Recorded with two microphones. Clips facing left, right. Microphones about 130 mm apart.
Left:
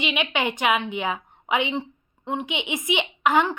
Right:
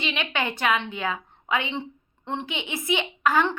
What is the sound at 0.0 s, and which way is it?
A woman's voice, 15° left (ahead or behind).